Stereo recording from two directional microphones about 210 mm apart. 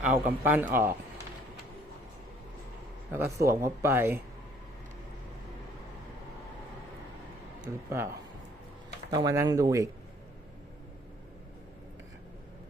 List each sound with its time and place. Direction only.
0.0 s speech: 10° right (ahead or behind)
3.1 s speech: 10° right (ahead or behind)
7.9 s speech: 15° right (ahead or behind)